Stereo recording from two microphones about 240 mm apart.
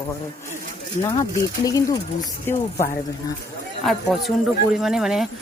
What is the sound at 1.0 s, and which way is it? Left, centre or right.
Speech, centre.